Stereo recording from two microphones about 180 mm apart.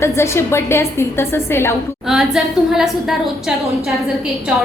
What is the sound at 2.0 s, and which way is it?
A woman's voice, 5° right (ahead or behind).